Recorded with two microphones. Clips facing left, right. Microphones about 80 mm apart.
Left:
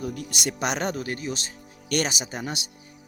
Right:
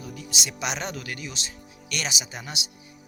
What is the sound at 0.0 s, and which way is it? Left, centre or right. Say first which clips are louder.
Speech: left 5 dB; left.